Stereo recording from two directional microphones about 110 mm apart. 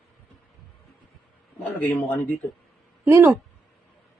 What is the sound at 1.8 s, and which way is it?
Speech, 20° left (ahead or behind).